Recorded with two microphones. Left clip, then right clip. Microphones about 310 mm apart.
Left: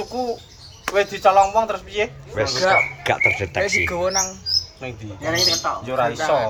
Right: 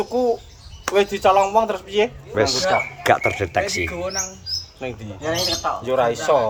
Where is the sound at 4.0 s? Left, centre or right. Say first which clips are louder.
Left 5 dB; centre.